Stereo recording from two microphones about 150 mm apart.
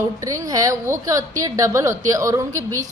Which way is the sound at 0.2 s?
20° right (ahead or behind).